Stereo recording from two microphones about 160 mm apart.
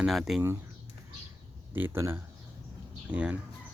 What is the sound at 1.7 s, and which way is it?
A man's voice, 15° right (ahead or behind).